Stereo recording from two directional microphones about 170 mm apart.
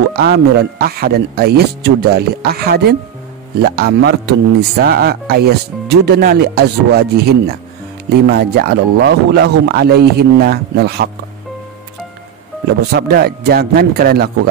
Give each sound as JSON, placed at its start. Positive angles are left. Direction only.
{"t": 0.1, "sound": "speech", "side_deg": -70}
{"t": 12.9, "sound": "speech", "side_deg": -65}